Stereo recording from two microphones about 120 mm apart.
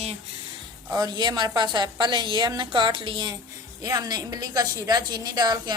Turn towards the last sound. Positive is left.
turn(degrees=-35)  # may be behind; listen again after turning